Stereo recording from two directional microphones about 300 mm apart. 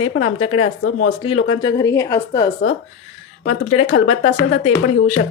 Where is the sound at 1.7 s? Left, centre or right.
Centre.